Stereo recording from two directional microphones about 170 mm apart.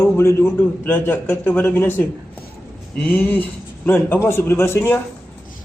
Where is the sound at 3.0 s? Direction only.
10° left (ahead or behind).